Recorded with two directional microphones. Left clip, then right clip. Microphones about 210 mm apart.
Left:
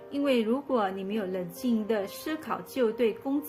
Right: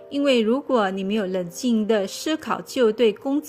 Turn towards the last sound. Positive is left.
turn(degrees=-40)  # may be behind; listen again after turning